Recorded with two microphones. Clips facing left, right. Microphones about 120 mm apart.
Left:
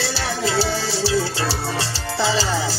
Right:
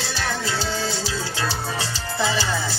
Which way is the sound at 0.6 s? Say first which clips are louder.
Left 4 dB; 90° left.